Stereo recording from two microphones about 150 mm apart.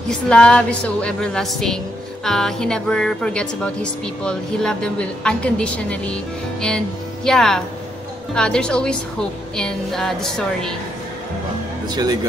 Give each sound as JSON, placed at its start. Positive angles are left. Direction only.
{"t": 0.3, "sound": "speech", "side_deg": 5}
{"t": 7.2, "sound": "speech", "side_deg": 5}
{"t": 11.9, "sound": "speech", "side_deg": -25}